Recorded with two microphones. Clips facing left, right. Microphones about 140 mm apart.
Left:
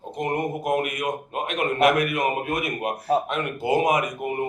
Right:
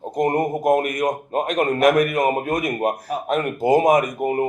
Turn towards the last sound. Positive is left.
turn(degrees=-40)  # may be behind; listen again after turning